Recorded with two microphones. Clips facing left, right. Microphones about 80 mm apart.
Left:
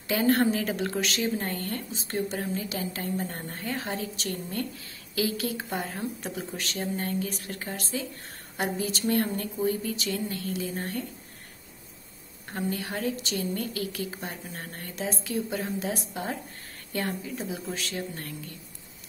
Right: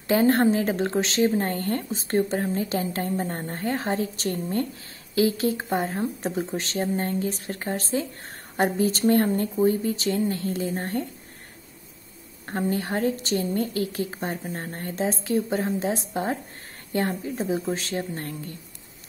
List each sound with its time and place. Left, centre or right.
0.1 s speech: right
12.4 s speech: right